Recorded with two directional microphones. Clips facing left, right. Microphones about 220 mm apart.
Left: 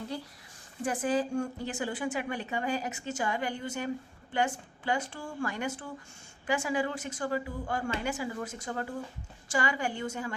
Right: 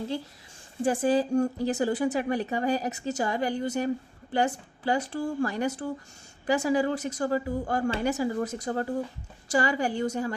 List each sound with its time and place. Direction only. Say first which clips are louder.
0.9 s a woman's voice: right 5 dB; 35° right (ahead or behind)